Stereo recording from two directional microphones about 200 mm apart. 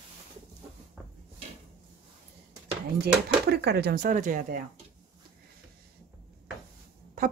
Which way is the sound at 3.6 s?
50° right (ahead or behind).